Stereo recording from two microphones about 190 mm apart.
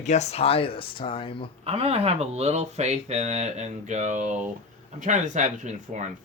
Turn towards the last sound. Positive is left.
turn(degrees=-40)  # may be behind; listen again after turning